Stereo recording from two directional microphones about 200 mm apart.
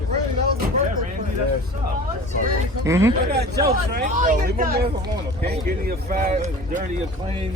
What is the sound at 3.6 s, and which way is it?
Speech, 45° right (ahead or behind).